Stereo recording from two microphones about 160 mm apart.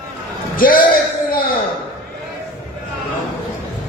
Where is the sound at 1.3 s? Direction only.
65° left (ahead or behind).